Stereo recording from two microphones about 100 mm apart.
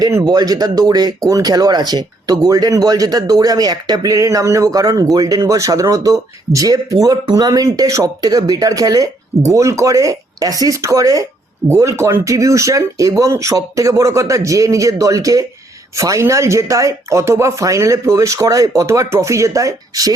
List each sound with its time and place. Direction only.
0.1 s speech: 35° right (ahead or behind)